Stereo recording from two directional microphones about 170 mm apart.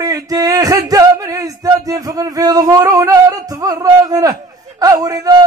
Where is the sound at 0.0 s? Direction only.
20° right (ahead or behind).